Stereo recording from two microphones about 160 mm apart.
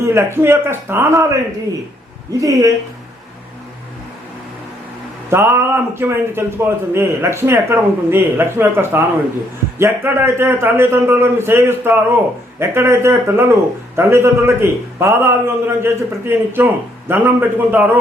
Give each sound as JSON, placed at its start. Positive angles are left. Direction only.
{"t": 0.0, "sound": "a man's voice", "side_deg": -15}
{"t": 2.4, "sound": "speech", "side_deg": -20}
{"t": 5.3, "sound": "a man's voice", "side_deg": -15}